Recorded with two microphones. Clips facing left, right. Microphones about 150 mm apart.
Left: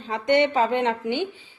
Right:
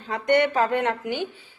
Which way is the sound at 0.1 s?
20° left (ahead or behind).